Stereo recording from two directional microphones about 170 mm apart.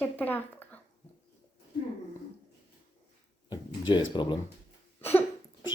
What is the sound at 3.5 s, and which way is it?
Speech, 25° left (ahead or behind).